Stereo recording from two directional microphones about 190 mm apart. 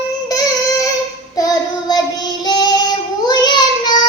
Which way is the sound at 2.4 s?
20° left (ahead or behind).